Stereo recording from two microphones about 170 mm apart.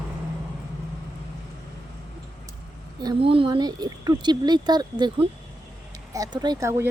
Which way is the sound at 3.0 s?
30° right (ahead or behind).